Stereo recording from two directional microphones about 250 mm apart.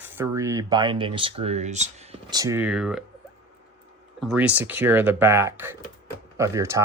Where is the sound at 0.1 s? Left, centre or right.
Centre; by 2.0 s right.